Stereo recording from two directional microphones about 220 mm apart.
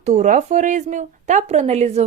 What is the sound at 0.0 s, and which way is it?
Speech, 35° right (ahead or behind).